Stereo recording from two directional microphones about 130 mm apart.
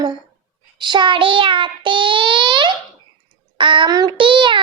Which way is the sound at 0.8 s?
35° right (ahead or behind).